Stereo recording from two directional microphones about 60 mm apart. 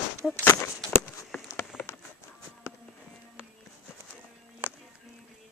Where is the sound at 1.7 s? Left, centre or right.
Centre.